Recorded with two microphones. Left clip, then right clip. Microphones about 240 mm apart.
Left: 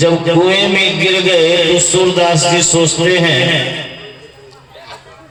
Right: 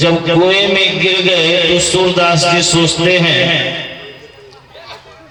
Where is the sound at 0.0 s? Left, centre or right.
Right.